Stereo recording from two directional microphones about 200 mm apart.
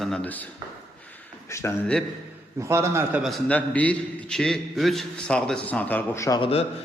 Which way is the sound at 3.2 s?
5° left (ahead or behind).